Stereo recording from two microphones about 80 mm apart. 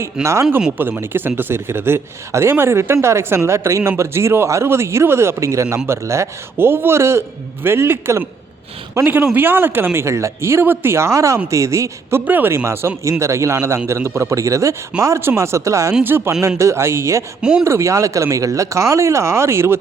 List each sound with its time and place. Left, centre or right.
0.0 s speech: right
12.2 s speech: right
16.0 s speech: right